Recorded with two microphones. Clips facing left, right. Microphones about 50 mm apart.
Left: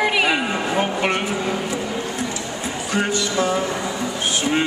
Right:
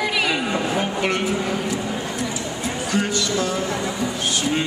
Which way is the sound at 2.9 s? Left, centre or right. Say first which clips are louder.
Left 2 dB; left.